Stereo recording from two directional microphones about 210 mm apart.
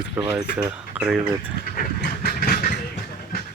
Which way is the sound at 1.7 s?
45° left (ahead or behind).